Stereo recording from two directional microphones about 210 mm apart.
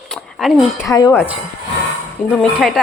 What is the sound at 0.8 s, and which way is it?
Speech, 15° left (ahead or behind).